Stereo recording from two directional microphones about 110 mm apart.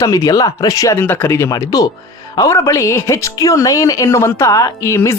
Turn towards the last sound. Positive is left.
turn(degrees=25)  # may be behind; listen again after turning